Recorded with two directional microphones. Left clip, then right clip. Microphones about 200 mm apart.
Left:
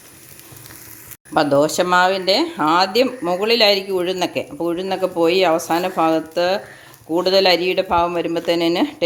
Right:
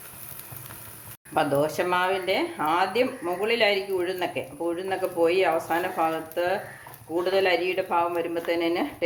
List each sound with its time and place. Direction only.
1.3 s speech: 40° left (ahead or behind); by 8.9 s 55° left (ahead or behind)